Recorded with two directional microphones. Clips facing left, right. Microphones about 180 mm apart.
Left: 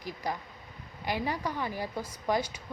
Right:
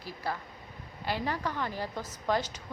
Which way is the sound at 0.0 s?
15° left (ahead or behind).